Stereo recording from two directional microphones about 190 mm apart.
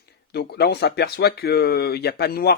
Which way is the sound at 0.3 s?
60° left (ahead or behind).